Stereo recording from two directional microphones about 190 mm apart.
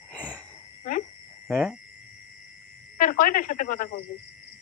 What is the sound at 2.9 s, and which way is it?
Speech, 45° left (ahead or behind).